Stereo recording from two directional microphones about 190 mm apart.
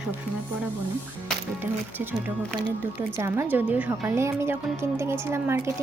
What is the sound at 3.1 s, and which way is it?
A woman's voice, 15° right (ahead or behind).